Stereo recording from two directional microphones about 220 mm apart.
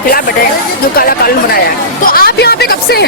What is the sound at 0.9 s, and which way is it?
Speech, 45° left (ahead or behind).